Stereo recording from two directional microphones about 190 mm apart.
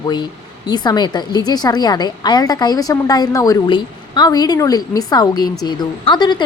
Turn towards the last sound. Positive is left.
turn(degrees=25)  # may be behind; listen again after turning